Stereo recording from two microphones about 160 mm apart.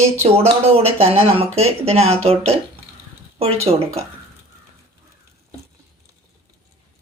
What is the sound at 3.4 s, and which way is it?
Speech, 40° right (ahead or behind).